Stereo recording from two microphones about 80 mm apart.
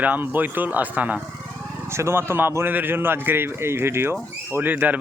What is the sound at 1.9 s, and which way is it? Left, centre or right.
A man's voice, right.